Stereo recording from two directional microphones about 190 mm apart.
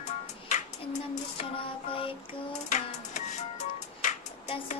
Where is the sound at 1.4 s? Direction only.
30° left (ahead or behind).